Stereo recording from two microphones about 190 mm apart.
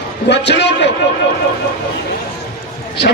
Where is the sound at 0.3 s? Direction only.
65° left (ahead or behind).